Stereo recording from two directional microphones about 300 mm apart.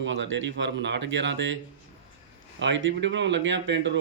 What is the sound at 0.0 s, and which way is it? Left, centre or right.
Speech, right.